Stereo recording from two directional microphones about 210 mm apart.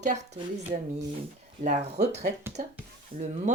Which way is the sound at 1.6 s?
35° right (ahead or behind).